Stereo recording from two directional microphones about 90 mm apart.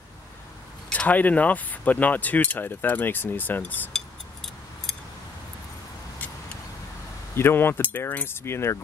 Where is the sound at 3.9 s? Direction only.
5° left (ahead or behind).